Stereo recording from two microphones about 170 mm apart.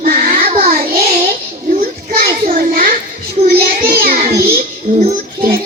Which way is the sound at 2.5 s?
55° right (ahead or behind).